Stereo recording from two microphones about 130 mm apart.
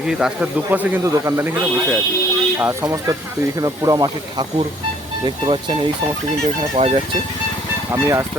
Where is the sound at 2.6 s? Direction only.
25° right (ahead or behind).